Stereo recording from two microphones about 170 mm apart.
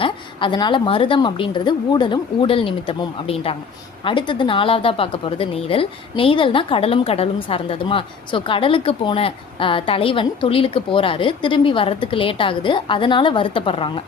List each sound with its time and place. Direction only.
0.0 s a woman's voice: 30° left (ahead or behind)